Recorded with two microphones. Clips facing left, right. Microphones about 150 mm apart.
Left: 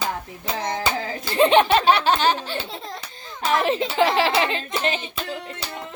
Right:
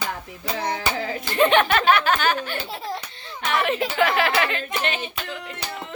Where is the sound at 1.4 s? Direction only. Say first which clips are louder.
Left 2 dB; 30° left (ahead or behind).